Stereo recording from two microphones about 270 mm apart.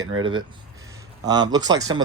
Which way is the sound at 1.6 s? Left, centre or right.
Centre.